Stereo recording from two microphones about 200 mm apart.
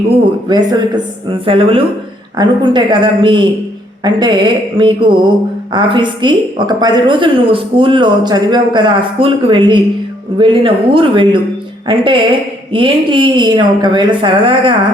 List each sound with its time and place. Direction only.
0.4 s a woman's voice: 20° right (ahead or behind)